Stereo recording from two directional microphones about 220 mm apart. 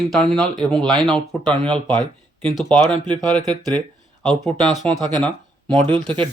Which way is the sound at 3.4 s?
20° right (ahead or behind).